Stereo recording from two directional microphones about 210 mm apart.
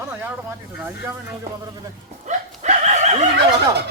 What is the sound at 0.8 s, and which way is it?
Speech, 10° right (ahead or behind).